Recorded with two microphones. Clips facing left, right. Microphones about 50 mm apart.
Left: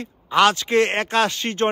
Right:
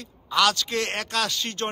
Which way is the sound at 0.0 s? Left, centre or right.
Left.